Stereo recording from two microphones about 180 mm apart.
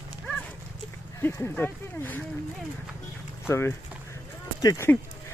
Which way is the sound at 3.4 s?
15° left (ahead or behind).